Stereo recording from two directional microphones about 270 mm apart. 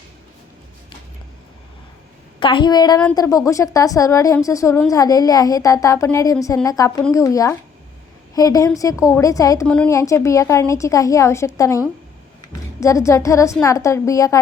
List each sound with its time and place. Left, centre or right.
2.4 s a woman's voice: centre
12.8 s a woman's voice: centre